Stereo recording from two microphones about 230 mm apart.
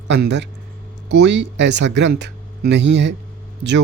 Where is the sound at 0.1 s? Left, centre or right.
Right.